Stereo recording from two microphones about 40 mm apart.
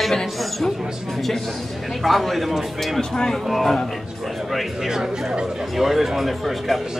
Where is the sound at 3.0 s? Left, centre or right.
Centre.